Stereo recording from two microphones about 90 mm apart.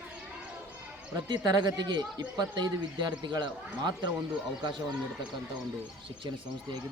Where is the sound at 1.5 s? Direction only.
50° right (ahead or behind).